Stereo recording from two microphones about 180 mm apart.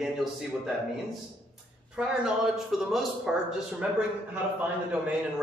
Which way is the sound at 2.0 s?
5° right (ahead or behind).